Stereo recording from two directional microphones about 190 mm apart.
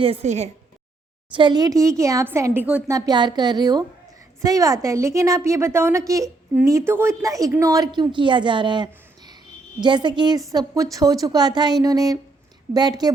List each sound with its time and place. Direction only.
0.0 s a woman's voice: 30° right (ahead or behind)
1.3 s a woman's voice: 25° right (ahead or behind); by 2.9 s 10° right (ahead or behind)
2.9 s a woman's voice: 20° right (ahead or behind)